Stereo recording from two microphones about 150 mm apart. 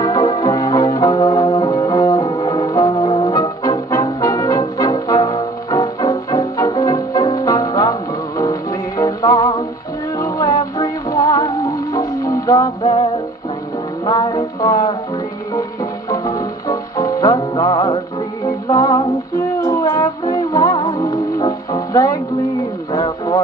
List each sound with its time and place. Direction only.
0.0 s music: 25° left (ahead or behind)
16.1 s music: 25° left (ahead or behind)
18.7 s female singing: 25° left (ahead or behind)
19.6 s music: 20° left (ahead or behind)
22.9 s radio: 30° left (ahead or behind)